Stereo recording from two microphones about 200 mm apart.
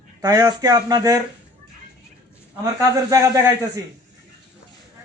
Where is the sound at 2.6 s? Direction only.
15° right (ahead or behind).